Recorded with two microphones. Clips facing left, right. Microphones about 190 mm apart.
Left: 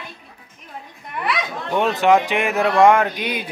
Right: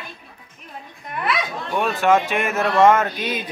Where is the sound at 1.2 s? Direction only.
20° left (ahead or behind).